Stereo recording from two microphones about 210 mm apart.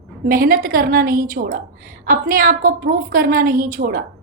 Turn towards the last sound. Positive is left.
turn(degrees=-40)  # may be behind; listen again after turning